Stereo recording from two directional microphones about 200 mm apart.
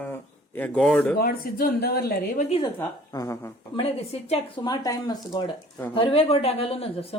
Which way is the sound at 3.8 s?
30° left (ahead or behind).